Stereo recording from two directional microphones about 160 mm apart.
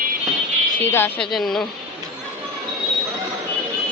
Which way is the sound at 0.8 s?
15° left (ahead or behind).